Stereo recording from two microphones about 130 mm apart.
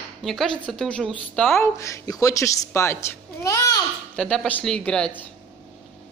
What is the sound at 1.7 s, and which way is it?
Speech, 25° left (ahead or behind).